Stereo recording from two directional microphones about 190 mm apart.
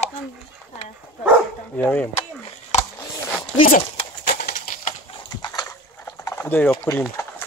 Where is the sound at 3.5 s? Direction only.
45° left (ahead or behind).